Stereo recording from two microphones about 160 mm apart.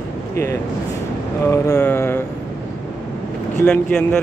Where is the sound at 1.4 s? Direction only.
15° left (ahead or behind).